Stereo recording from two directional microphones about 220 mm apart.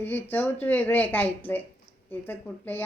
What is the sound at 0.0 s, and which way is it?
Speech, 10° left (ahead or behind).